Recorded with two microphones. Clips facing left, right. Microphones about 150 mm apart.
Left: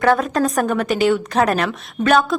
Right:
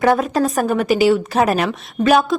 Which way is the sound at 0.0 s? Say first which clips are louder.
Right 1 dB; 10° right (ahead or behind).